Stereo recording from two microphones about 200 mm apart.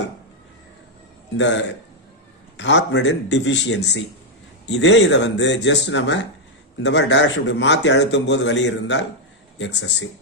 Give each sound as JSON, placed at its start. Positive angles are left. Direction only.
{"t": 1.3, "sound": "a man's voice", "side_deg": 65}